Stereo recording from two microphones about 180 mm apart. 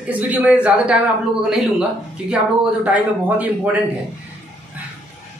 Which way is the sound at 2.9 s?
10° right (ahead or behind).